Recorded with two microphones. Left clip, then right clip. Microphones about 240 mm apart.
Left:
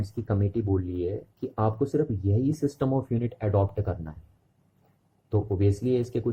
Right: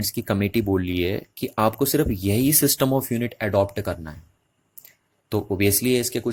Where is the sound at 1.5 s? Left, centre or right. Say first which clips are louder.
Right 6 dB; right.